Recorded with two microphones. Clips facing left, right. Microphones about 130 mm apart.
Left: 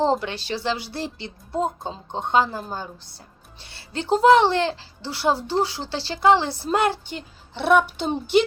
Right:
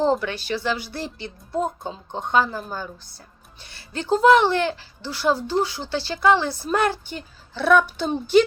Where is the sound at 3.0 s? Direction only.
70° left (ahead or behind).